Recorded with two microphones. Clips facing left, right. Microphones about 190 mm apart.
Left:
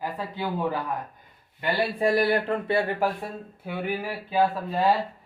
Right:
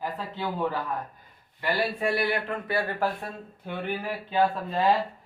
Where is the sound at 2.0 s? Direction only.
35° left (ahead or behind).